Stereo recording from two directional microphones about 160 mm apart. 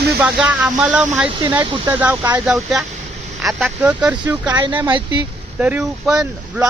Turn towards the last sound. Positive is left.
turn(degrees=-5)  # may be behind; listen again after turning